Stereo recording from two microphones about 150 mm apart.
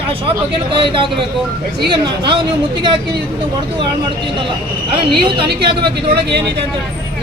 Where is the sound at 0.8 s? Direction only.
35° right (ahead or behind).